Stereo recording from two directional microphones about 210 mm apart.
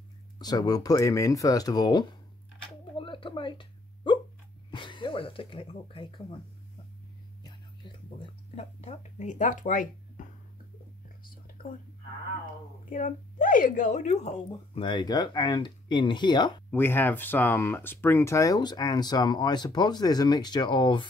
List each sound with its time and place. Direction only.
0.4 s speech: 20° left (ahead or behind)
3.0 s a sound: 25° left (ahead or behind)
4.6 s speech: 20° left (ahead or behind)
7.4 s a sound: 20° left (ahead or behind); by 10.2 s 40° left (ahead or behind)
12.9 s speech: 40° left (ahead or behind); by 16.6 s 20° left (ahead or behind)
16.7 s speech: 10° left (ahead or behind)